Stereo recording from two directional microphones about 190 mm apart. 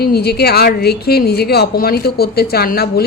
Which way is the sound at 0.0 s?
55° left (ahead or behind).